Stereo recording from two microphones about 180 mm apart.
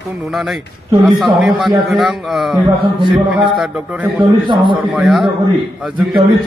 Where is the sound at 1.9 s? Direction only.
Centre (ahead or behind).